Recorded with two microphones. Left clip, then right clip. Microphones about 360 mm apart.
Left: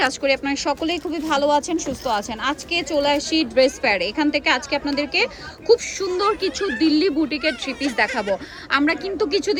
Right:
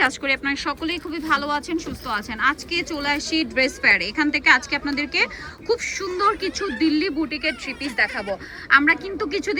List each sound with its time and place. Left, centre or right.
0.0 s a woman's voice: centre
7.3 s speech: left
8.7 s a woman's voice: centre